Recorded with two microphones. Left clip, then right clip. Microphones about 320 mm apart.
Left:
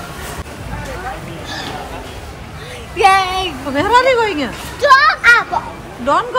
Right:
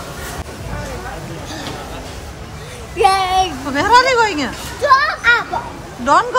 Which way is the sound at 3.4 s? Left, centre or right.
Centre.